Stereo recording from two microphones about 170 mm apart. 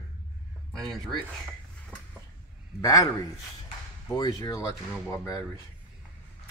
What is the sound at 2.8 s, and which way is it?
Speech, 20° left (ahead or behind).